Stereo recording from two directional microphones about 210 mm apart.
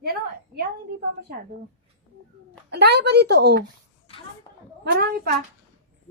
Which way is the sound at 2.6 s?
55° right (ahead or behind).